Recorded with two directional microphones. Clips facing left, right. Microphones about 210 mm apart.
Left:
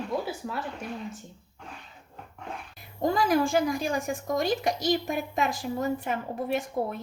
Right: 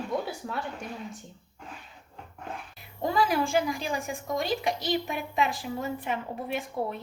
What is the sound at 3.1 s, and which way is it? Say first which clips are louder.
A woman's voice: left 1 dB; 45° left (ahead or behind).